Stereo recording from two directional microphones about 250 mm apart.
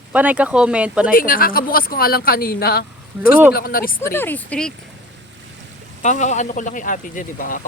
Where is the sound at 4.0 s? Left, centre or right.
Centre.